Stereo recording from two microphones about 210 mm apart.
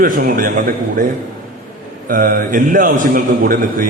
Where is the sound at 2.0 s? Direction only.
40° right (ahead or behind).